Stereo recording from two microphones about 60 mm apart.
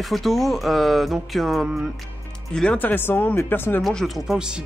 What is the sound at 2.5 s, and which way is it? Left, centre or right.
Speech, centre.